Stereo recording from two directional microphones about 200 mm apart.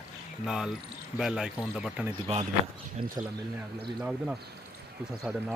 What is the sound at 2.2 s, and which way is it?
Speech, 25° right (ahead or behind).